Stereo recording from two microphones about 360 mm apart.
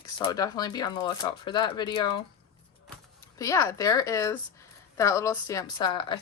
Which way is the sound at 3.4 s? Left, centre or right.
Centre.